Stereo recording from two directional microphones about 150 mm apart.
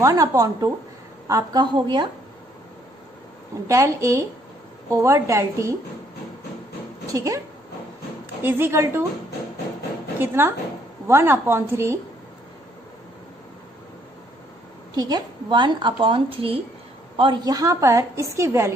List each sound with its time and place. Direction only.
0.0 s a woman's voice: 20° right (ahead or behind)
3.6 s a woman's voice: 20° right (ahead or behind)
7.1 s a woman's voice: 20° right (ahead or behind)
10.1 s a woman's voice: 15° right (ahead or behind)
15.0 s a woman's voice: 25° right (ahead or behind)